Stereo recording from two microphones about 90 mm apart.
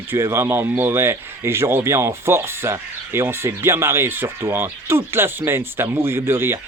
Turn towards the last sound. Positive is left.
turn(degrees=-25)  # may be behind; listen again after turning